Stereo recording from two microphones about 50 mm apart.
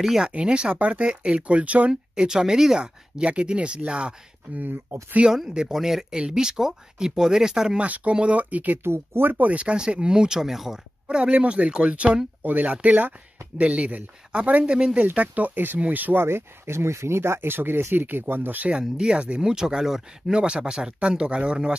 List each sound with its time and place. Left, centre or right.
0.0 s speech: centre
0.3 s speech: right
1.9 s speech: centre
4.9 s speech: right
5.5 s speech: centre
7.8 s speech: right
8.8 s speech: right
9.5 s speech: right; by 10.8 s centre
11.1 s speech: right
12.4 s speech: right
13.6 s speech: right
15.1 s speech: right
16.2 s speech: right
18.7 s speech: centre